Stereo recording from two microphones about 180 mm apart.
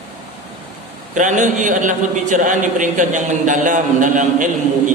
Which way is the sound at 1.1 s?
45° right (ahead or behind).